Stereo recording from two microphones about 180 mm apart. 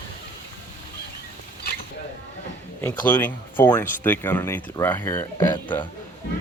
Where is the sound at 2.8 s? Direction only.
10° left (ahead or behind).